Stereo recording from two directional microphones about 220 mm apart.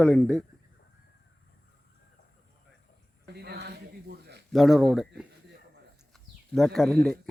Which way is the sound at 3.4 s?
50° right (ahead or behind).